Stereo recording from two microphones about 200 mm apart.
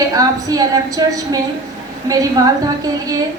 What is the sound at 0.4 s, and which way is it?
Speech, 15° right (ahead or behind).